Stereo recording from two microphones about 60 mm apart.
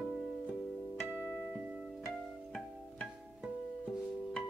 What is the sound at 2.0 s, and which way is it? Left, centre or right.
Music, centre.